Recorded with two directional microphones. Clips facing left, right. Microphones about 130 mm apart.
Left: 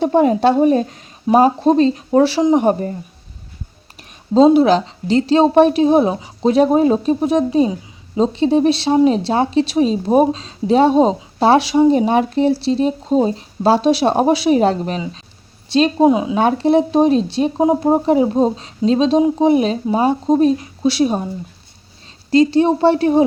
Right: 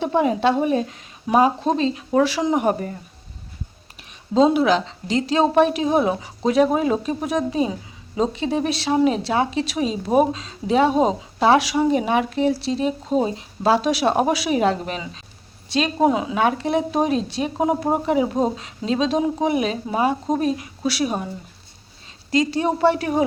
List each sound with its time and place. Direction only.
0.0 s a woman's voice: 40° left (ahead or behind)
4.4 s a woman's voice: 35° left (ahead or behind)
16.4 s a woman's voice: 30° left (ahead or behind)
22.3 s speech: 30° left (ahead or behind)